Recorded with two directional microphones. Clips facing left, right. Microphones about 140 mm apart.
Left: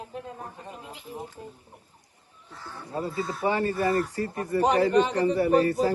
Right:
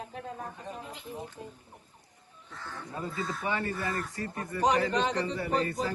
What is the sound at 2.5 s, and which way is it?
Speech, 35° left (ahead or behind).